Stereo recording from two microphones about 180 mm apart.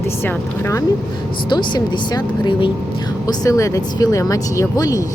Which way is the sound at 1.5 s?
25° left (ahead or behind).